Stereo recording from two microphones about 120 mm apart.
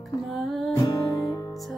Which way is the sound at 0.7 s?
30° left (ahead or behind).